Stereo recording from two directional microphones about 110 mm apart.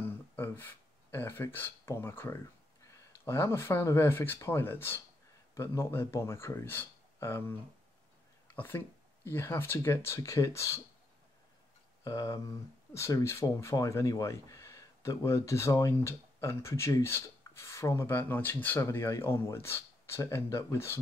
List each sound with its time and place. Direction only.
0.0 s a sound: 20° left (ahead or behind)
2.8 s speech: 25° left (ahead or behind)
8.5 s speech: 20° left (ahead or behind)
12.0 s speech: 30° left (ahead or behind)